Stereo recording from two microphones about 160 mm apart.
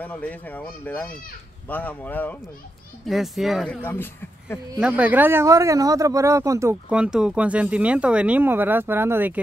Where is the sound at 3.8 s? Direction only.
15° left (ahead or behind).